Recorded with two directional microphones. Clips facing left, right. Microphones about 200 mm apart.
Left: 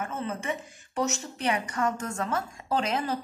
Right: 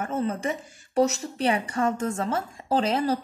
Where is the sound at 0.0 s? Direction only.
35° right (ahead or behind).